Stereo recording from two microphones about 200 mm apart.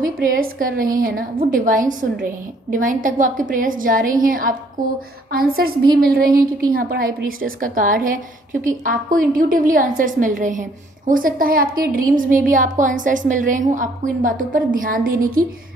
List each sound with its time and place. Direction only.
0.2 s a woman's voice: 45° right (ahead or behind)